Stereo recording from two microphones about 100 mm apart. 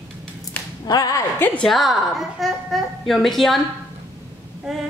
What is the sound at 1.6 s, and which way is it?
A woman's voice, centre (ahead or behind).